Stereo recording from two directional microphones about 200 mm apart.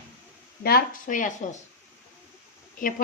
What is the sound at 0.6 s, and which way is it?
Speech, 45° left (ahead or behind).